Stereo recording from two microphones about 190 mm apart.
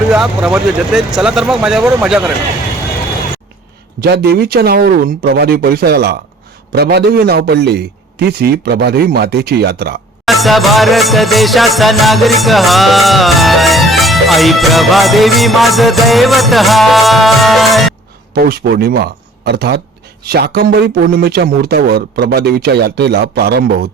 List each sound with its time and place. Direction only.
0.1 s music: 5° right (ahead or behind)
4.0 s speech: 55° right (ahead or behind)
10.2 s music: centre (ahead or behind)
18.3 s speech: 55° right (ahead or behind)